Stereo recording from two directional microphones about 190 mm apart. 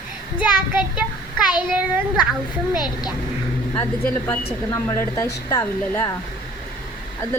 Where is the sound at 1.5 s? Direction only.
5° right (ahead or behind).